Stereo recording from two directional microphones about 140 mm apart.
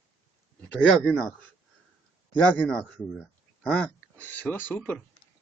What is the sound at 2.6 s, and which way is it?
Speech, 10° left (ahead or behind).